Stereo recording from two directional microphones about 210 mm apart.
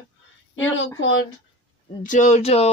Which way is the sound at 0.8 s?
65° left (ahead or behind).